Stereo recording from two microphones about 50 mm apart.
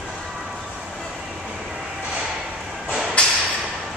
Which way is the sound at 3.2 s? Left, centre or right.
Left.